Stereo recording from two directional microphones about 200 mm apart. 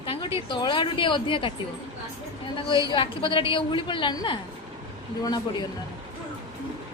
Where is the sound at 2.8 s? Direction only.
25° left (ahead or behind).